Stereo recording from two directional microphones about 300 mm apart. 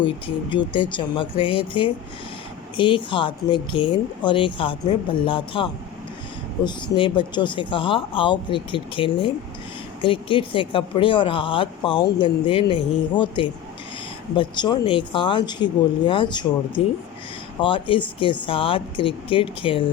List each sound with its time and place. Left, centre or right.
0.5 s speech: centre
6.7 s speech: centre